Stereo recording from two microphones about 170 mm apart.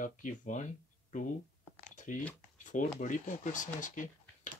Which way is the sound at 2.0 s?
50° left (ahead or behind).